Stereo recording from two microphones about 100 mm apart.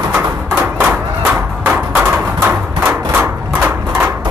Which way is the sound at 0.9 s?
25° right (ahead or behind).